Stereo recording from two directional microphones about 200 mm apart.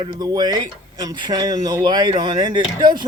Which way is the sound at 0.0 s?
20° right (ahead or behind).